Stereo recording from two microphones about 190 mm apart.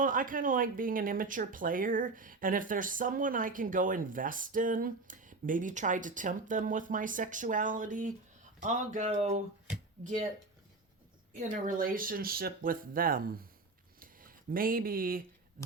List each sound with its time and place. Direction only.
0.0 s speech: 45° right (ahead or behind)
11.3 s speech: 45° right (ahead or behind)
14.0 s a sound: 50° right (ahead or behind)